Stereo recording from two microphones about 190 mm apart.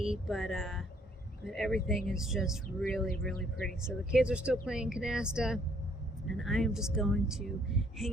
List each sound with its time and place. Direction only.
0.0 s speech: centre (ahead or behind)